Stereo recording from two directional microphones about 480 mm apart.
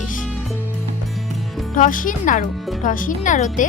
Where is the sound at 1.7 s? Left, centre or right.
Centre.